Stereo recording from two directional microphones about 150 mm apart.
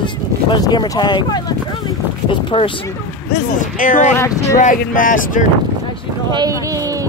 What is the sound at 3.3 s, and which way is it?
Speech, 60° left (ahead or behind).